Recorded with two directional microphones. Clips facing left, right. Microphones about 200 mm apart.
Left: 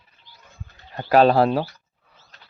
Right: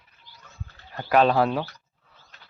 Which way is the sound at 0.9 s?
35° left (ahead or behind).